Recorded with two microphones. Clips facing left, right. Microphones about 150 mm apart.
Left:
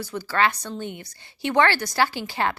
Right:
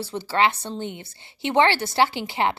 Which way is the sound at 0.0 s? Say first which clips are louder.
Right 1 dB; 25° right (ahead or behind).